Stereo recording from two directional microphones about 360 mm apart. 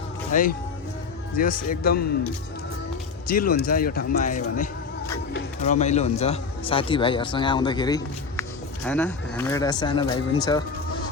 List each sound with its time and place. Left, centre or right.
0.3 s speech: left
3.2 s speech: left